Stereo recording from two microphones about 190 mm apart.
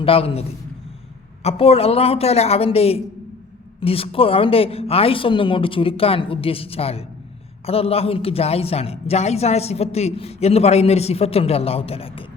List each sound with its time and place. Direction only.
0.0 s a woman's voice: 30° left (ahead or behind)
1.5 s a woman's voice: 30° left (ahead or behind)